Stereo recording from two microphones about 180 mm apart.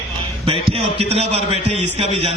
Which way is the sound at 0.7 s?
35° right (ahead or behind).